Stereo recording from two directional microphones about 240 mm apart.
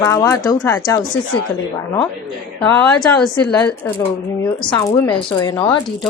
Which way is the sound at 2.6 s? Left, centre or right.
Centre.